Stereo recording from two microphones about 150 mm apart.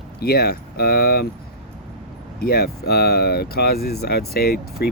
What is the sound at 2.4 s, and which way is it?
Speech, 90° left.